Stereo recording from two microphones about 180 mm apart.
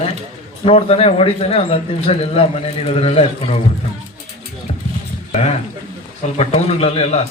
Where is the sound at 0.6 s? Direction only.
30° left (ahead or behind).